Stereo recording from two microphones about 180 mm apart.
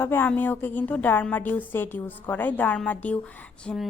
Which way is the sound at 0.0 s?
10° left (ahead or behind).